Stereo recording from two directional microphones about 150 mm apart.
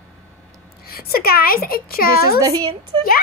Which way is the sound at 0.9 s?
90° left.